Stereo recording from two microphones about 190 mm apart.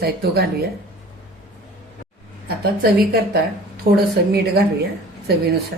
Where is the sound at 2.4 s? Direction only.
55° right (ahead or behind).